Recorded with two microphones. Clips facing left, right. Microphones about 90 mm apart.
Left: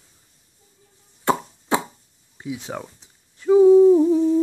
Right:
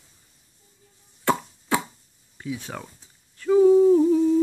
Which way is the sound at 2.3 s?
20° left (ahead or behind).